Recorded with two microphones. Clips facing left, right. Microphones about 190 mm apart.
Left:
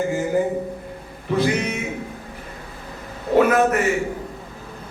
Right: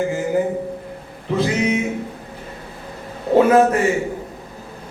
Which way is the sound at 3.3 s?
30° right (ahead or behind).